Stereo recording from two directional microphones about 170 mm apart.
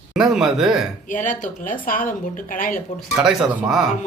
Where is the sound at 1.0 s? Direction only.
50° left (ahead or behind).